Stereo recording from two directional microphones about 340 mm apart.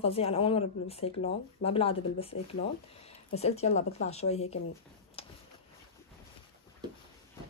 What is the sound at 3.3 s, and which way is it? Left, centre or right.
Speech, centre.